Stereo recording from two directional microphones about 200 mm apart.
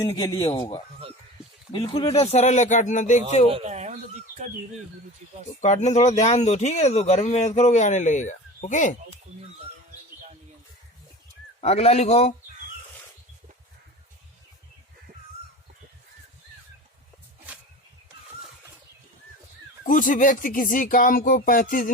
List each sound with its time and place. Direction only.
0.0 s a man's voice: 15° left (ahead or behind); by 3.5 s 35° left (ahead or behind)
3.5 s speech: 35° right (ahead or behind)
5.5 s speech: 35° left (ahead or behind)
11.6 s speech: 30° left (ahead or behind)
19.8 s speech: 40° left (ahead or behind)